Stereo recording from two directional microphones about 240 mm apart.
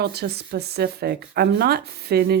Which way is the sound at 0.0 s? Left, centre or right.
Right.